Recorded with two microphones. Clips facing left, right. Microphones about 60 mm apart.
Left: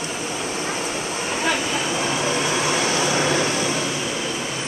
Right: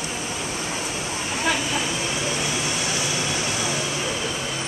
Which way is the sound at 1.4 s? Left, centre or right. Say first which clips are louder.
Left 1 dB; centre.